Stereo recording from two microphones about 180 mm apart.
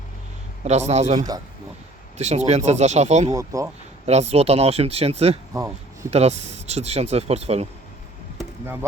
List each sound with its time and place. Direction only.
0.6 s speech: 40° right (ahead or behind)
3.3 s speech: 15° right (ahead or behind)
4.0 s speech: 35° right (ahead or behind)
5.5 s speech: 15° right (ahead or behind)
6.1 s speech: 35° right (ahead or behind)
8.6 s speech: 10° right (ahead or behind)